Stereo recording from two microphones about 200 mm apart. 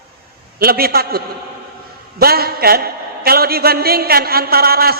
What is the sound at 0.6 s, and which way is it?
A man's voice, 50° right (ahead or behind).